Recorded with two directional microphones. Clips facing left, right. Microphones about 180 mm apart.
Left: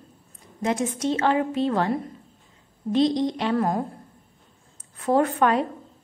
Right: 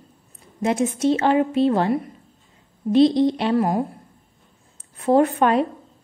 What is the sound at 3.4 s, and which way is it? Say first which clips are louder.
Speech: right 3 dB; 15° right (ahead or behind).